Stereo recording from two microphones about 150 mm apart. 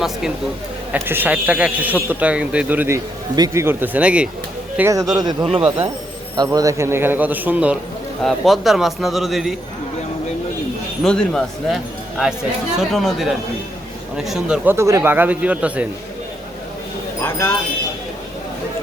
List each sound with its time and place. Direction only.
0.9 s speech: 15° right (ahead or behind)
4.8 s a man's voice: 20° right (ahead or behind); by 9.6 s centre (ahead or behind)
11.0 s a man's voice: 5° left (ahead or behind)